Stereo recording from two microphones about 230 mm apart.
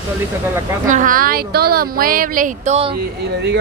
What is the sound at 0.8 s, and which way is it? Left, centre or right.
Speech, right.